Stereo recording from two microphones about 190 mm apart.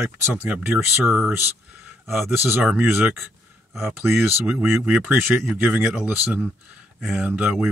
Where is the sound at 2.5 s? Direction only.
5° right (ahead or behind).